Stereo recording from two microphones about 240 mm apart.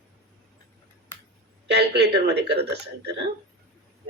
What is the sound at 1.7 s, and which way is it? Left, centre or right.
Speech, right.